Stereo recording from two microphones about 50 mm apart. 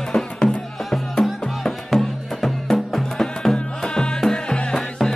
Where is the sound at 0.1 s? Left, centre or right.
Centre.